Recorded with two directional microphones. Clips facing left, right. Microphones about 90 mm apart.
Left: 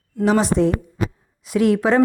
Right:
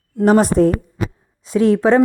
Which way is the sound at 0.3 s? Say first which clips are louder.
Right 4 dB; 45° right (ahead or behind).